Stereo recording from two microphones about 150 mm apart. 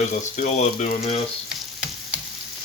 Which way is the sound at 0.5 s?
45° left (ahead or behind).